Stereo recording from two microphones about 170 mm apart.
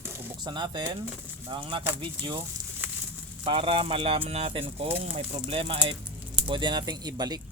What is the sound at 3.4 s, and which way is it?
Speech, 30° right (ahead or behind).